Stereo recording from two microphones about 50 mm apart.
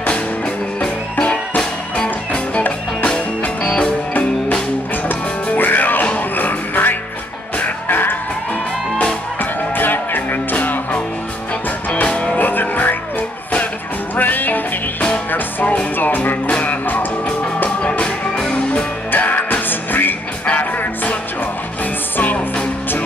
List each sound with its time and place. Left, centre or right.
0.7 s music: centre
4.1 s music: left
9.4 s music: left
12.4 s music: left
14.1 s music: left
17.8 s music: left
19.1 s music: left
20.4 s music: left